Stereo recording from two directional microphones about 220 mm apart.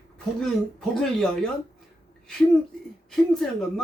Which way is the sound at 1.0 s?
Centre (ahead or behind).